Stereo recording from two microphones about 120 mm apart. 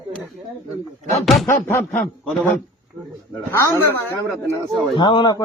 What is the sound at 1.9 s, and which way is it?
Speech, 5° left (ahead or behind).